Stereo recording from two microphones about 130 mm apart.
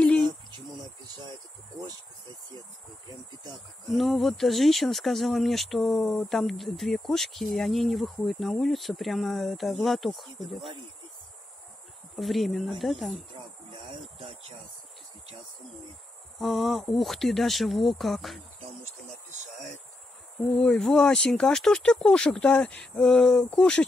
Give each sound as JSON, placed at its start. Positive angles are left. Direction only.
{"t": 0.0, "sound": "a sound", "side_deg": 5}
{"t": 3.5, "sound": "speech", "side_deg": 0}
{"t": 12.2, "sound": "speech", "side_deg": 0}
{"t": 13.7, "sound": "a sound", "side_deg": -45}
{"t": 16.3, "sound": "speech", "side_deg": 0}
{"t": 19.0, "sound": "speech", "side_deg": -65}
{"t": 20.3, "sound": "speech", "side_deg": 5}